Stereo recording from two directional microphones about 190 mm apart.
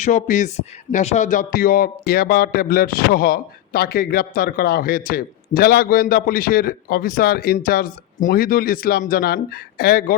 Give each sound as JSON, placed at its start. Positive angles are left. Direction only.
{"t": 0.0, "sound": "speech", "side_deg": 40}